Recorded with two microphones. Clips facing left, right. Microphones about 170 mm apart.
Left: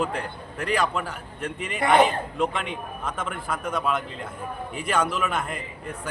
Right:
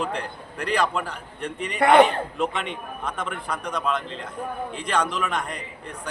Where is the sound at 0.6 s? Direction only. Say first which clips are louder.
Right 1 dB; centre (ahead or behind).